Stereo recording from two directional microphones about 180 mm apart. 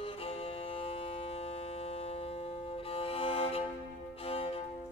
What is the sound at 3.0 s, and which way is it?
Violin, 30° left (ahead or behind).